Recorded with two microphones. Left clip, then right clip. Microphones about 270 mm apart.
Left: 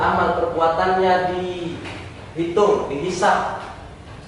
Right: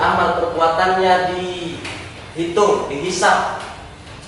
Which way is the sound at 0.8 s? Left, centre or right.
Centre.